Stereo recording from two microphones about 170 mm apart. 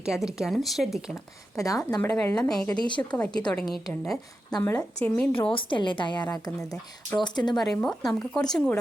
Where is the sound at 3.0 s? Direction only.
5° left (ahead or behind).